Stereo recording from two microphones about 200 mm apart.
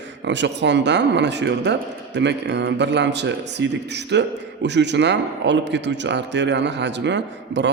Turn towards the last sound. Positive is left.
turn(degrees=-60)  # may be behind; listen again after turning